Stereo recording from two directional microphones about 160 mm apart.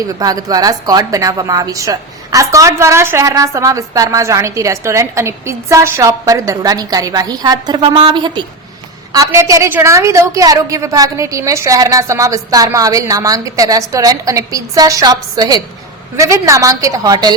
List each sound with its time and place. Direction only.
0.2 s a woman's voice: 25° right (ahead or behind)